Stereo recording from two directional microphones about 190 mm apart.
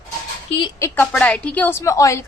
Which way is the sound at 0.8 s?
15° left (ahead or behind).